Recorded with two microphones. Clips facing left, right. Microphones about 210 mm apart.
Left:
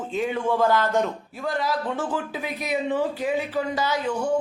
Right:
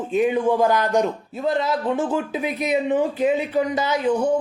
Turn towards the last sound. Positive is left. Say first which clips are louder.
# right 5 dB
turn(degrees=-20)  # may be behind; listen again after turning